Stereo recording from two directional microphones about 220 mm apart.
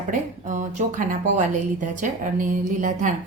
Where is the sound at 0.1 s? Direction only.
35° right (ahead or behind).